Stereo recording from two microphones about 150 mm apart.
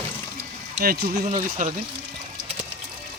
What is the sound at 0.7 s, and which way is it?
Speech, 80° right.